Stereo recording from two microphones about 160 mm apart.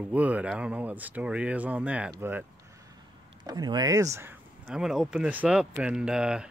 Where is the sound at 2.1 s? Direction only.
15° right (ahead or behind).